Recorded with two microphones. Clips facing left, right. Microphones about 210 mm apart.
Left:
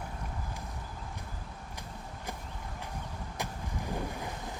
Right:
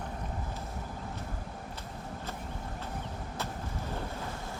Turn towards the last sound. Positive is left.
turn(degrees=15)  # may be behind; listen again after turning